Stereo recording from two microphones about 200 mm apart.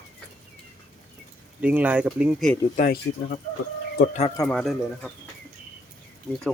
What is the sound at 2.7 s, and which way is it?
Speech, 50° left (ahead or behind).